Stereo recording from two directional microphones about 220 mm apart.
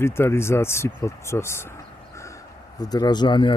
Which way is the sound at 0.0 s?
10° left (ahead or behind).